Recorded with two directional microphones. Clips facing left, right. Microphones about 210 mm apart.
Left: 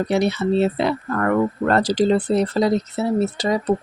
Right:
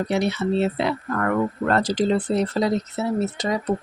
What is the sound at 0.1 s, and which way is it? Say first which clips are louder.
Speech: left 3 dB; 35° left (ahead or behind).